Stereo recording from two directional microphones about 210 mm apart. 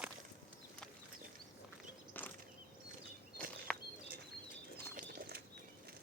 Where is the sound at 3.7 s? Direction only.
5° left (ahead or behind).